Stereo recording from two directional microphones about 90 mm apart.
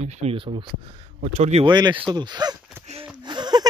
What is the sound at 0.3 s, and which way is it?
Speech, 85° right.